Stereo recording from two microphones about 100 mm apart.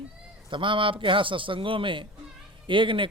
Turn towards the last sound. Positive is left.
turn(degrees=-55)  # may be behind; listen again after turning